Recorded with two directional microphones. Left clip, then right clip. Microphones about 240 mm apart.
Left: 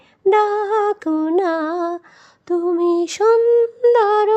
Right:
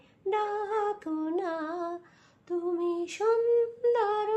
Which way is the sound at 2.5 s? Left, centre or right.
Left.